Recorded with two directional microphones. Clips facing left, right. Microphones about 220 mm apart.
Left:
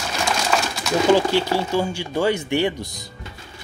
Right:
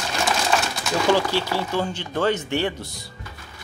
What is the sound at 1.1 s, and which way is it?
Speech, 15° left (ahead or behind).